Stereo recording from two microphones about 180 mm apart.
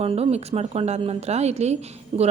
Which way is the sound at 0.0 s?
35° right (ahead or behind).